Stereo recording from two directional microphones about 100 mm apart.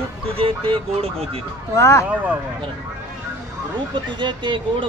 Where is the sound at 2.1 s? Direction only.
15° right (ahead or behind).